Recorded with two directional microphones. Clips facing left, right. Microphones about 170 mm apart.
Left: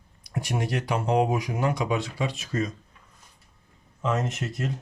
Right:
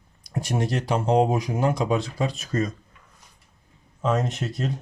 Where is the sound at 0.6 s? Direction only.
30° right (ahead or behind).